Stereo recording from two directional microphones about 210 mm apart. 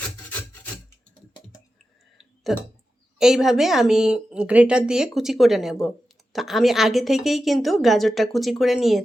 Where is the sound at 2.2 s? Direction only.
Centre (ahead or behind).